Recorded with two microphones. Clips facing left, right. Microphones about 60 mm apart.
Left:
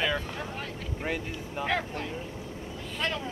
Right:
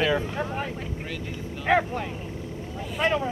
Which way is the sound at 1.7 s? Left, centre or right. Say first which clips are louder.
Right 9 dB; centre.